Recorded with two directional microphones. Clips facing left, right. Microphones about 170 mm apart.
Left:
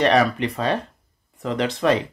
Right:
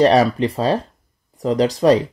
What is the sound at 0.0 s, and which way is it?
Speech, 35° right (ahead or behind).